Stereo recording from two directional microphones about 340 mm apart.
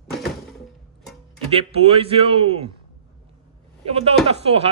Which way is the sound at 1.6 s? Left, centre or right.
Centre.